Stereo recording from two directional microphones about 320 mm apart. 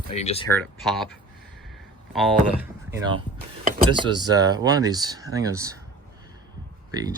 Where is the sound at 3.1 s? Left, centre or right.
Centre.